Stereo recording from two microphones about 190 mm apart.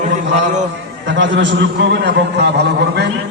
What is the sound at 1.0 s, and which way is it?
A man's voice, 70° right (ahead or behind).